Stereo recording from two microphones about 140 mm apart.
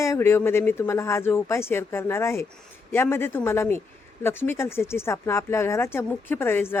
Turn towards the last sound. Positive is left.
turn(degrees=15)  # may be behind; listen again after turning